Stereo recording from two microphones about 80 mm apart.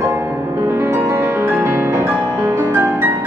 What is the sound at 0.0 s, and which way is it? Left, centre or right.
Music, right.